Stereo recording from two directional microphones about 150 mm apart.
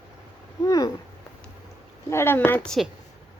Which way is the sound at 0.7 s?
25° left (ahead or behind).